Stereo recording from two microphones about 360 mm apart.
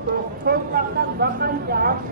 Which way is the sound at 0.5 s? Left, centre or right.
Right.